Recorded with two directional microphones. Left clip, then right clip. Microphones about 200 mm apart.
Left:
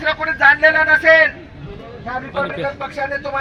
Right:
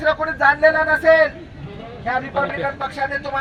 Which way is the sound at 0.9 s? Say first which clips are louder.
Left 2 dB; 20° right (ahead or behind).